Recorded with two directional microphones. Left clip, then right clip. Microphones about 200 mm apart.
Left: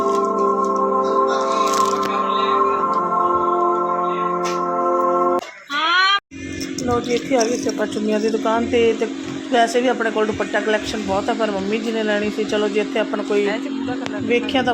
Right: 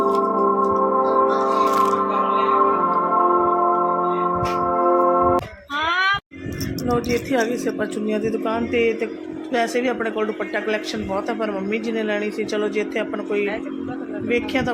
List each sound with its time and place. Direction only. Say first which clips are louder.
0.0 s music: left 1 dB; centre (ahead or behind)
7.3 s speech: left 3 dB; 5° right (ahead or behind)
8.1 s speech: left 5 dB; 10° left (ahead or behind)